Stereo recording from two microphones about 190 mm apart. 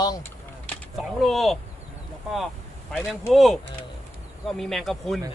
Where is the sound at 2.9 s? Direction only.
Centre (ahead or behind).